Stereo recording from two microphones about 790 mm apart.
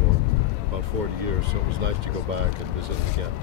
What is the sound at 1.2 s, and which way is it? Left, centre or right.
Speech, right.